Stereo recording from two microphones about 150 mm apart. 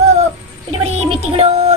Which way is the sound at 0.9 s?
45° right (ahead or behind).